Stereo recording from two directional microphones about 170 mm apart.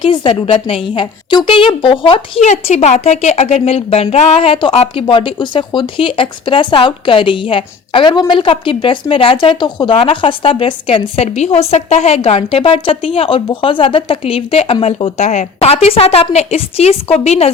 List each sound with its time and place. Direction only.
0.0 s a woman's voice: 30° left (ahead or behind)